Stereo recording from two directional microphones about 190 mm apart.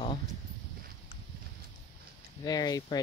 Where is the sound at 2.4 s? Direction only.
20° left (ahead or behind).